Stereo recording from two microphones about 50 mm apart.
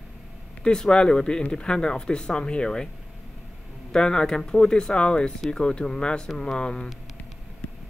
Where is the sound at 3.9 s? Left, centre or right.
Centre.